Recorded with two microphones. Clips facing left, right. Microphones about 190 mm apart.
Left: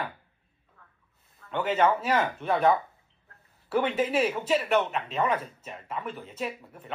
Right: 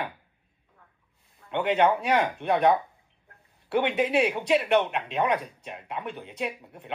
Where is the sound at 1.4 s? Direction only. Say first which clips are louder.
Right 2 dB; 25° right (ahead or behind).